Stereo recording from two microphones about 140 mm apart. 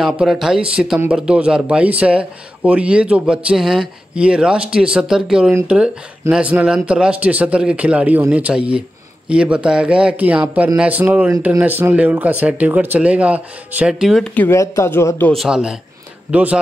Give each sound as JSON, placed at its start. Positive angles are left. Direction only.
{"t": 0.0, "sound": "speech", "side_deg": -5}
{"t": 14.3, "sound": "speech", "side_deg": 10}
{"t": 15.3, "sound": "speech", "side_deg": -5}